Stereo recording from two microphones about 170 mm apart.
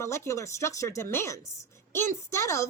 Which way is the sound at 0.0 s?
15° left (ahead or behind).